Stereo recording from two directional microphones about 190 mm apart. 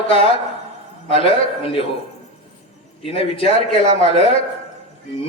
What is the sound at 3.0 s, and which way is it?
Speech, 30° left (ahead or behind).